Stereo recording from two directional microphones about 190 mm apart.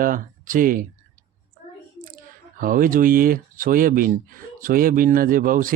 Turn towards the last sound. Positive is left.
turn(degrees=-45)  # may be behind; listen again after turning